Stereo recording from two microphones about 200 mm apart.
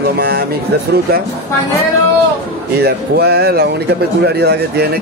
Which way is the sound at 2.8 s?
50° right (ahead or behind).